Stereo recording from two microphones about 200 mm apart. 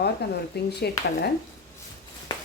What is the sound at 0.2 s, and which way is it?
Speech, 55° left (ahead or behind).